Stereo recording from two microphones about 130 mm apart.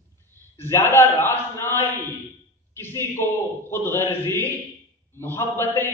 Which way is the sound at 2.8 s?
20° left (ahead or behind).